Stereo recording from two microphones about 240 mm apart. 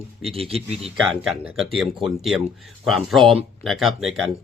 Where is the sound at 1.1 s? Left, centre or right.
Centre.